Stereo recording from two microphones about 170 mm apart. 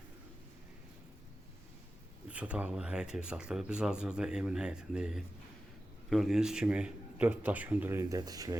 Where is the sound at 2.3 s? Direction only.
5° right (ahead or behind).